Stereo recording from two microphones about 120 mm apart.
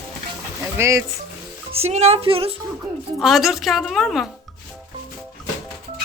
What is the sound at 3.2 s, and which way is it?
Speech, centre (ahead or behind).